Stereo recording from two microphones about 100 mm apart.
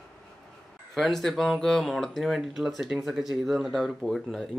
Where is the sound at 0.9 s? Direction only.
5° left (ahead or behind).